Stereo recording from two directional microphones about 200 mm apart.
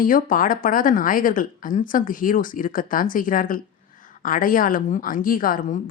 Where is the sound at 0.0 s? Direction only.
45° left (ahead or behind).